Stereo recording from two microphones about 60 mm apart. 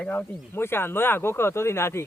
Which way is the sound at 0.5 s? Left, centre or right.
Left.